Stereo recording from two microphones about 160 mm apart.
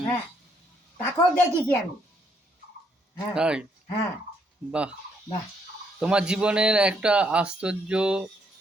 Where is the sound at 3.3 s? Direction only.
5° right (ahead or behind).